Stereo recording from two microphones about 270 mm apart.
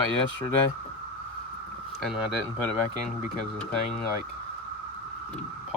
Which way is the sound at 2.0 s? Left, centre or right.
Centre.